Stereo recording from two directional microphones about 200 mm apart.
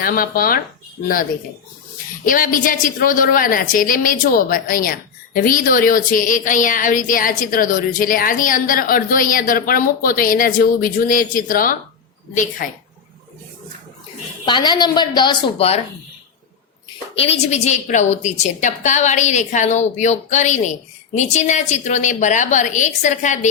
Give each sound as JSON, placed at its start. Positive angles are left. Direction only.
{"t": 0.0, "sound": "a woman's voice", "side_deg": 45}
{"t": 2.2, "sound": "a woman's voice", "side_deg": 45}
{"t": 14.4, "sound": "a woman's voice", "side_deg": 25}
{"t": 17.2, "sound": "a woman's voice", "side_deg": 30}